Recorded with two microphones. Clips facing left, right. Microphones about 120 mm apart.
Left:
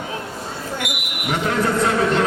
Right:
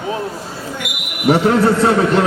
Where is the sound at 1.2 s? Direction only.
35° right (ahead or behind).